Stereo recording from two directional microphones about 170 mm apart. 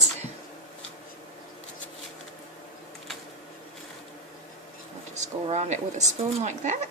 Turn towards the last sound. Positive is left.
turn(degrees=-45)  # may be behind; listen again after turning